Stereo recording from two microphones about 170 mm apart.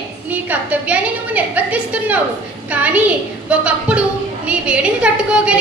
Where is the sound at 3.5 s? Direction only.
5° right (ahead or behind).